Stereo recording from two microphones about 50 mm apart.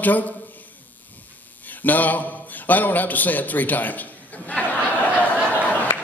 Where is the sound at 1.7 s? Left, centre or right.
Left.